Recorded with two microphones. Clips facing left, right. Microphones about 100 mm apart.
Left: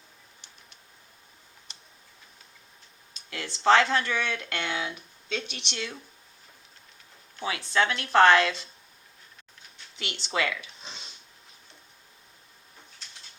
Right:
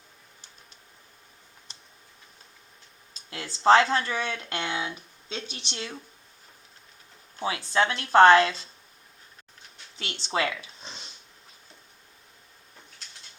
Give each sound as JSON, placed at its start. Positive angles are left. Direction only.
{"t": 3.2, "sound": "speech", "side_deg": -30}
{"t": 7.3, "sound": "speech", "side_deg": -30}
{"t": 10.0, "sound": "speech", "side_deg": -35}